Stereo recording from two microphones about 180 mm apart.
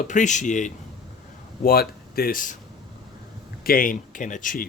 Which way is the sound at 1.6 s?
55° left (ahead or behind).